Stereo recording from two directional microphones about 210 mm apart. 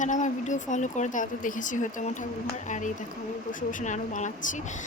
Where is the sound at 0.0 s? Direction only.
35° left (ahead or behind).